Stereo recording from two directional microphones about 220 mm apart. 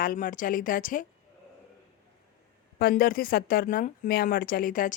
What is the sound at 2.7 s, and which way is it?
Speech, 45° left (ahead or behind).